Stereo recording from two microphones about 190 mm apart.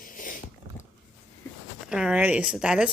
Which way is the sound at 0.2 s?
45° left (ahead or behind).